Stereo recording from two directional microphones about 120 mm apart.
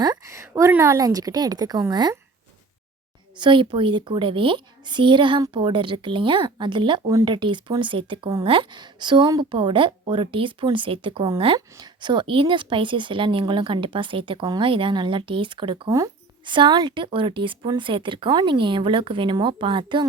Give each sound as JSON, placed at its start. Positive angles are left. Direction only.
{"t": 0.0, "sound": "a sound", "side_deg": -30}
{"t": 0.7, "sound": "a woman's voice", "side_deg": -25}
{"t": 3.3, "sound": "speech", "side_deg": -40}
{"t": 11.8, "sound": "speech", "side_deg": -40}